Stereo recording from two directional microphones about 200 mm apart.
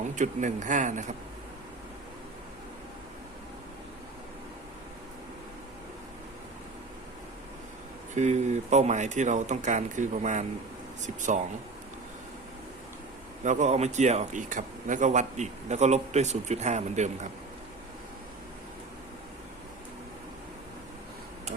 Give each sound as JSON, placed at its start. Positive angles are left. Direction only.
{"t": 0.2, "sound": "speech", "side_deg": -40}
{"t": 8.1, "sound": "speech", "side_deg": -35}
{"t": 13.4, "sound": "speech", "side_deg": -35}